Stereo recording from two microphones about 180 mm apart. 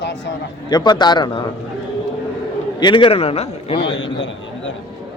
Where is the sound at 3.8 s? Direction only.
90° left.